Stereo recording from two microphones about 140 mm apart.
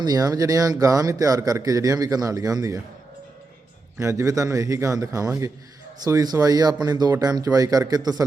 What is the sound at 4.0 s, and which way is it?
Speech, 20° right (ahead or behind).